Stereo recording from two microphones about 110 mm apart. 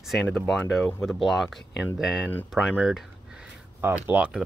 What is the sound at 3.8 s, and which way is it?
Speech, 20° right (ahead or behind).